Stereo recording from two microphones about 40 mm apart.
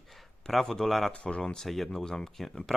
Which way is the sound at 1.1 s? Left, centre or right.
Left.